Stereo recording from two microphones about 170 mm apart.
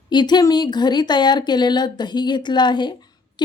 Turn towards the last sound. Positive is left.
turn(degrees=25)  # may be behind; listen again after turning